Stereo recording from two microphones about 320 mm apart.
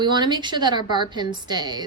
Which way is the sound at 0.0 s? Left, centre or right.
Centre.